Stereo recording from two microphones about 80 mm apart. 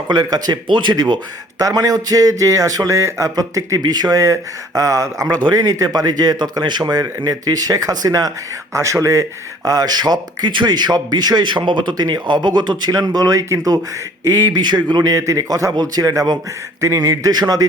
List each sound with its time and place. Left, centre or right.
0.1 s speech: right
1.5 s speech: right
9.6 s speech: right
14.5 s speech: right
15.1 s speech: right